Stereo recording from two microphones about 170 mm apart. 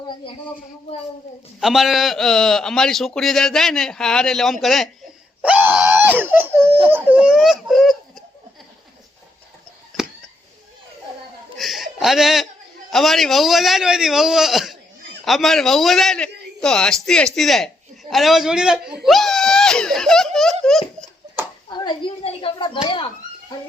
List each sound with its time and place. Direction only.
1.6 s a man's voice: centre (ahead or behind)
11.5 s a man's voice: centre (ahead or behind)
19.0 s a sound: centre (ahead or behind)
20.7 s giggle: 5° left (ahead or behind)
21.7 s speech: 30° left (ahead or behind)